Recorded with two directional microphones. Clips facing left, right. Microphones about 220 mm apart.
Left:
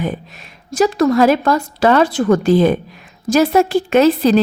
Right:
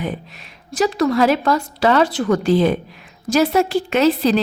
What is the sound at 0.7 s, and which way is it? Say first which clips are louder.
Speech: left 4 dB; 50° left (ahead or behind).